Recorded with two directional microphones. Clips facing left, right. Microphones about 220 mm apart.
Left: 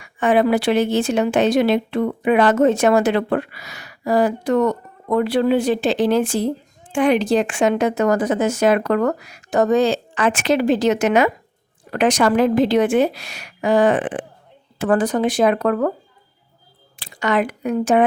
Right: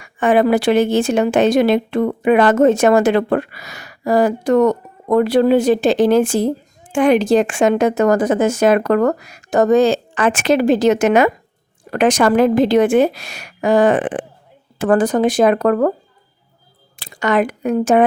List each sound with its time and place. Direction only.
0.0 s speech: 50° right (ahead or behind)
17.0 s speech: 45° right (ahead or behind)